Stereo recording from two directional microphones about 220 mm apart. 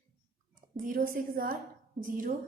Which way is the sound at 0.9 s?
40° right (ahead or behind).